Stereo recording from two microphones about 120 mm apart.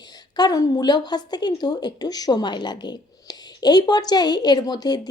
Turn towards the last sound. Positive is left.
turn(degrees=35)  # may be behind; listen again after turning